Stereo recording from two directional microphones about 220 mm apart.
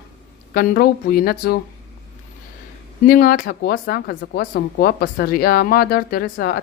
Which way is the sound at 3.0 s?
40° left (ahead or behind).